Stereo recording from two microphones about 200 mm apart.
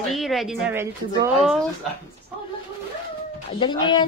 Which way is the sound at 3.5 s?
25° left (ahead or behind).